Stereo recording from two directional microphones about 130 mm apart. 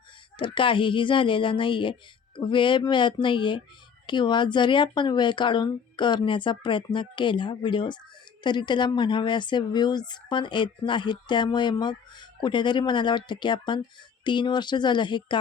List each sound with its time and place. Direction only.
0.3 s speech: 40° left (ahead or behind)